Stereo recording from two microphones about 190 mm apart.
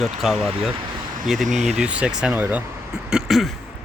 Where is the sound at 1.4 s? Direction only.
40° right (ahead or behind).